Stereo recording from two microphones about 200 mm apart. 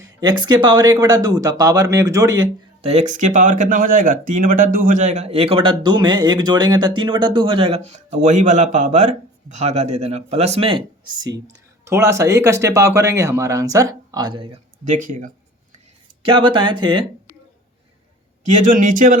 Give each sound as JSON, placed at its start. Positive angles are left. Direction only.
{"t": 0.0, "sound": "speech", "side_deg": -20}
{"t": 2.8, "sound": "speech", "side_deg": -35}
{"t": 14.8, "sound": "speech", "side_deg": -40}
{"t": 16.2, "sound": "speech", "side_deg": -25}
{"t": 18.4, "sound": "speech", "side_deg": -40}